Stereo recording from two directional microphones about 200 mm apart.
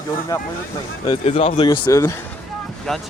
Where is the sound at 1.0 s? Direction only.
25° left (ahead or behind).